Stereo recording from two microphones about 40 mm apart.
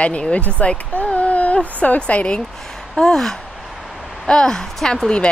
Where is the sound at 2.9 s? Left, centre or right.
Centre.